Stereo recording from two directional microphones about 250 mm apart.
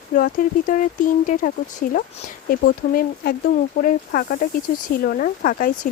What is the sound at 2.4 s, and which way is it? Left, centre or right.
Speech, left.